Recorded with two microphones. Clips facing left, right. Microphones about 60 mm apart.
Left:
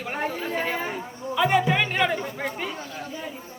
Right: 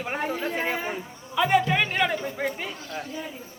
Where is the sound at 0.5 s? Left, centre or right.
Centre.